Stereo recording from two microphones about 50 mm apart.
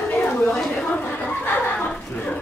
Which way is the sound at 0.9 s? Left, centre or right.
Left.